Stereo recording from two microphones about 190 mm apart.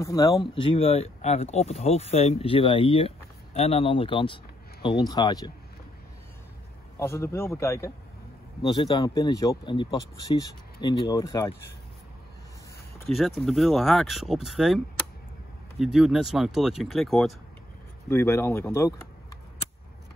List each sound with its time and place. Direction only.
0.0 s speech: 20° left (ahead or behind)
7.0 s speech: 15° left (ahead or behind)
13.0 s speech: centre (ahead or behind)
15.8 s speech: centre (ahead or behind)
18.0 s speech: 15° left (ahead or behind)